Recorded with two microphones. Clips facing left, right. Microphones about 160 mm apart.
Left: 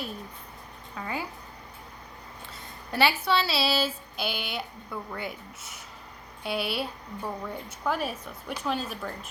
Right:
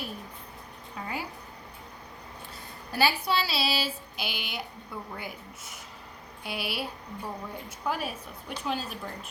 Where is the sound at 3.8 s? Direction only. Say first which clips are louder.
Left 4 dB; 55° left (ahead or behind).